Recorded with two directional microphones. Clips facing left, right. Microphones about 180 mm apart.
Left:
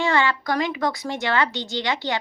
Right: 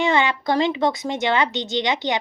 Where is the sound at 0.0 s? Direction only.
20° right (ahead or behind).